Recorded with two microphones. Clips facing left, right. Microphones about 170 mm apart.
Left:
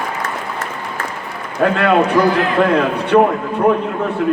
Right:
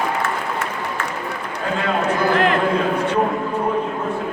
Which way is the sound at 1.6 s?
70° left (ahead or behind).